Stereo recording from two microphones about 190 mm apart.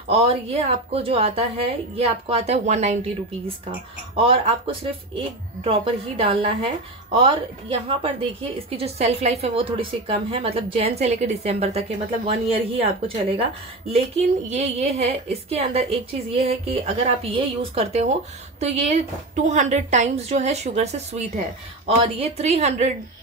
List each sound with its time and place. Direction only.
0.1 s speech: 30° right (ahead or behind)
4.1 s speech: 30° right (ahead or behind)